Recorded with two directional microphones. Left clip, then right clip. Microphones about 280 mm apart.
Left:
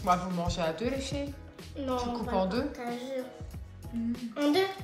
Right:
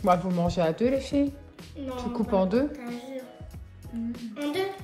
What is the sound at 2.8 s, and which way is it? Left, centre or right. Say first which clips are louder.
A woman's voice: left 2 dB; centre.